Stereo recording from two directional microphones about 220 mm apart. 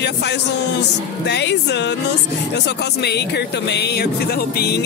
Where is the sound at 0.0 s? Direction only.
50° left (ahead or behind).